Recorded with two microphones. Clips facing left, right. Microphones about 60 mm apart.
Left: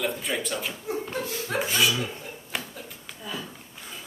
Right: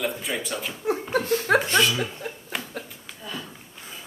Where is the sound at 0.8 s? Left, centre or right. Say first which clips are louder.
Right 6 dB; right.